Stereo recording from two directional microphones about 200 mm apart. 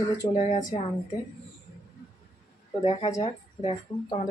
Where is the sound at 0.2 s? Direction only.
25° left (ahead or behind).